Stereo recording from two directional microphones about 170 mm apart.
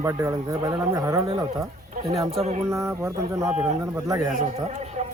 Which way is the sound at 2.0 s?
35° right (ahead or behind).